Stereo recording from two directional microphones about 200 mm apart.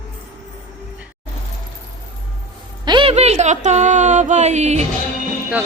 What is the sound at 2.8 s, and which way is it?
Speech, 25° right (ahead or behind).